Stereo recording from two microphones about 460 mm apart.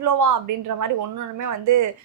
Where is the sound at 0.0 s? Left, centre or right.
Right.